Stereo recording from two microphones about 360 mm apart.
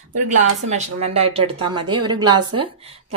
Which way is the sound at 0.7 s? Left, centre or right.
Centre.